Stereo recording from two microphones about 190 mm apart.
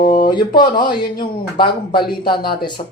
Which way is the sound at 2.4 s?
55° left (ahead or behind).